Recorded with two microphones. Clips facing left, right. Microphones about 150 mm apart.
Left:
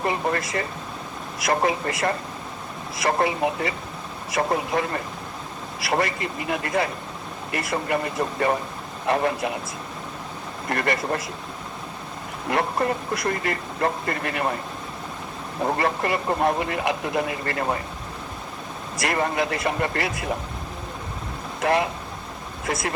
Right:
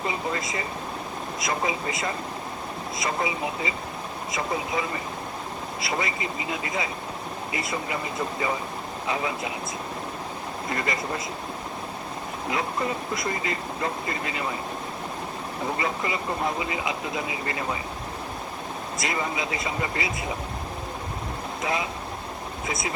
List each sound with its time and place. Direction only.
0.0 s speech: 60° left (ahead or behind)
10.7 s speech: 65° left (ahead or behind)
12.5 s speech: 60° left (ahead or behind)
15.6 s speech: 60° left (ahead or behind)
19.0 s speech: 60° left (ahead or behind)
21.6 s speech: 65° left (ahead or behind)